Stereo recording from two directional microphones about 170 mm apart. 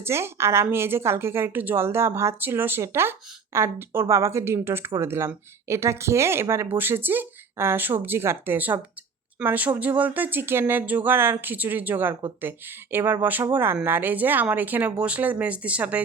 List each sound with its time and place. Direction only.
0.0 s a woman's voice: 15° right (ahead or behind)